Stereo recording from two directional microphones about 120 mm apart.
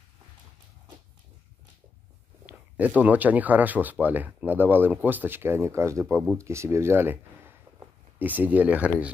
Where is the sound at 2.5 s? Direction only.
15° right (ahead or behind).